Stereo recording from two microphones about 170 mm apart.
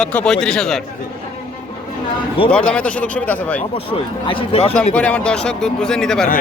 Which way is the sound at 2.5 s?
5° left (ahead or behind).